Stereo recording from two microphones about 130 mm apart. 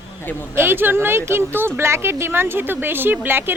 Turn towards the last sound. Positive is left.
turn(degrees=-15)  # may be behind; listen again after turning